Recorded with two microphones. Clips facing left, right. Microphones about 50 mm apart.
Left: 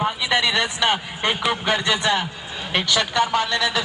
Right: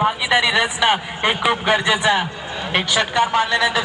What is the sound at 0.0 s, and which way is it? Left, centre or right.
A man's voice, centre.